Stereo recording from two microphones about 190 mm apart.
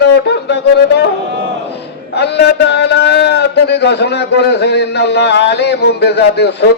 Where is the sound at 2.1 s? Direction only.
60° left (ahead or behind).